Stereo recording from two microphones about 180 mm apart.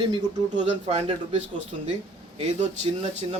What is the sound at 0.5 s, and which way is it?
Speech, 35° right (ahead or behind).